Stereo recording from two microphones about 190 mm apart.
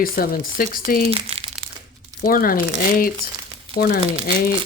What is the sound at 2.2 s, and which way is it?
Speech, 50° left (ahead or behind).